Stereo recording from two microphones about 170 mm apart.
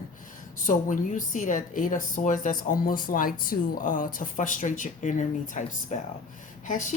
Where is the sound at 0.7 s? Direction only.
50° left (ahead or behind).